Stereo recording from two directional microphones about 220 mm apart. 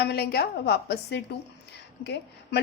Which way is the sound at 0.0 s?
50° left (ahead or behind).